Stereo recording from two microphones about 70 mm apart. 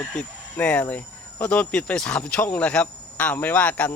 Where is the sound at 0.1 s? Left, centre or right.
Centre.